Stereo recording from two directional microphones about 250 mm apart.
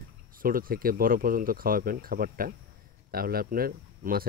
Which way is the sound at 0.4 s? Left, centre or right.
Right.